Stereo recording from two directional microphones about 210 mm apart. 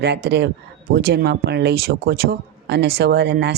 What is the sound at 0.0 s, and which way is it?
Speech, 50° right (ahead or behind).